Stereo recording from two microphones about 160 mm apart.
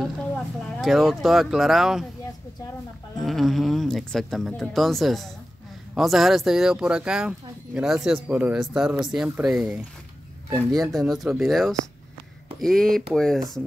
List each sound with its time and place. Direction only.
0.6 s speech: centre (ahead or behind)
3.2 s speech: centre (ahead or behind)